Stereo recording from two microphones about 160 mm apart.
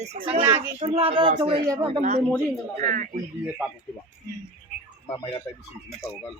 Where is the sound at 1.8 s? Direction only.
50° right (ahead or behind).